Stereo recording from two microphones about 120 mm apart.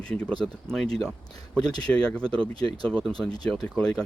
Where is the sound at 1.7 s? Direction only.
35° left (ahead or behind).